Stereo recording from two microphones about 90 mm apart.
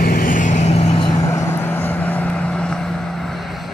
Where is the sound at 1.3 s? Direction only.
30° left (ahead or behind); by 3.4 s 5° left (ahead or behind).